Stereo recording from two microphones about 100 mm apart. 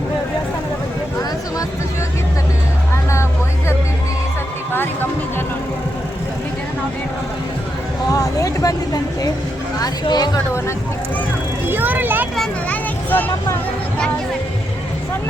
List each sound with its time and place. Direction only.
2.9 s music: 30° left (ahead or behind)
8.1 s a sound: 35° left (ahead or behind)
11.7 s vehicle: 20° right (ahead or behind)
12.7 s vehicle: 15° left (ahead or behind)